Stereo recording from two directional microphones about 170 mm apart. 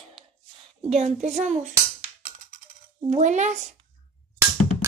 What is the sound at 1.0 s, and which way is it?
Speech, 40° right (ahead or behind).